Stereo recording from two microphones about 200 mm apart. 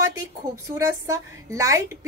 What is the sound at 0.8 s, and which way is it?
Speech, 15° right (ahead or behind).